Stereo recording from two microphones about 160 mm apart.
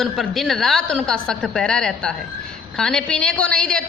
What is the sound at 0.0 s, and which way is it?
A woman's voice, centre (ahead or behind).